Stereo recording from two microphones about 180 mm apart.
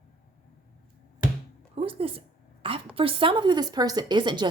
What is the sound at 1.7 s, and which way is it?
Speech, 30° right (ahead or behind).